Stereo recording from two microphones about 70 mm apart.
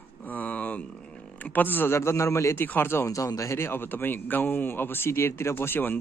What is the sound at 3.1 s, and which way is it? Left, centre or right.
Speech, left.